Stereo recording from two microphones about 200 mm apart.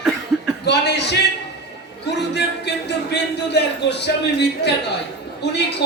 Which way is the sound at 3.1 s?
55° left (ahead or behind).